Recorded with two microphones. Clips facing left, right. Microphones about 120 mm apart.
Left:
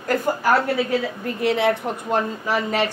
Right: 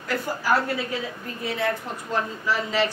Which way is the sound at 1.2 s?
70° left (ahead or behind).